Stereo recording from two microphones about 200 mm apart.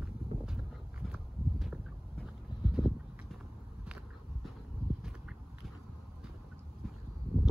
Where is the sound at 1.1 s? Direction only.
5° right (ahead or behind).